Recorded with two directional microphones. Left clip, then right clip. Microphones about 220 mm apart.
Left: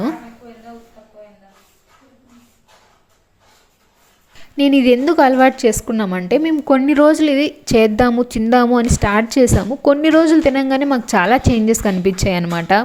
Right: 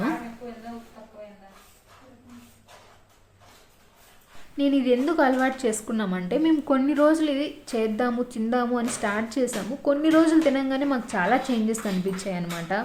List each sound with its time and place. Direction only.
4.5 s a woman's voice: 35° left (ahead or behind)